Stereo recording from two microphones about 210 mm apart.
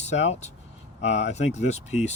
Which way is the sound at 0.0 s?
30° left (ahead or behind).